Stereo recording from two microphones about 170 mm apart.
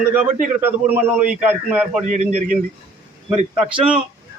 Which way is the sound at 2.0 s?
45° right (ahead or behind).